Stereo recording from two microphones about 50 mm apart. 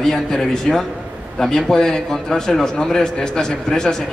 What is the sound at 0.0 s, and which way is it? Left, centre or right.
A man's voice, centre.